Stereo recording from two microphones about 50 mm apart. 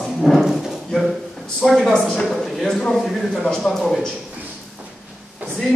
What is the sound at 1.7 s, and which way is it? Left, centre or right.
Speech, centre.